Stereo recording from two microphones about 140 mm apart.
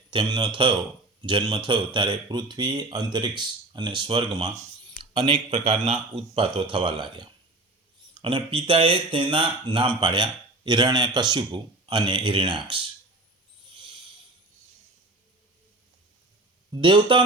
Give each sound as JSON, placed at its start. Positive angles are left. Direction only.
{"t": 0.1, "sound": "a man's voice", "side_deg": -35}
{"t": 5.1, "sound": "a man's voice", "side_deg": -50}
{"t": 16.7, "sound": "a man's voice", "side_deg": -35}